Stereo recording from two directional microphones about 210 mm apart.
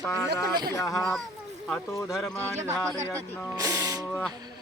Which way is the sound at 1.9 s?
15° left (ahead or behind).